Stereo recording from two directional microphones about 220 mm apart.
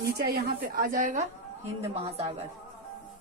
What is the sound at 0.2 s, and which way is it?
A woman's voice, 45° right (ahead or behind).